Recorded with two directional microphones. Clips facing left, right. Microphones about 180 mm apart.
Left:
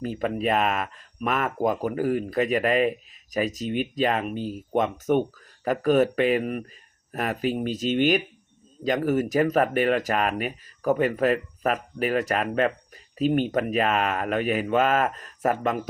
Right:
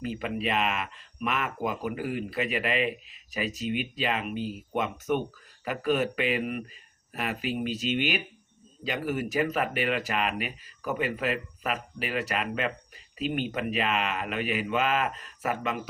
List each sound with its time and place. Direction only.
0.0 s speech: 40° left (ahead or behind)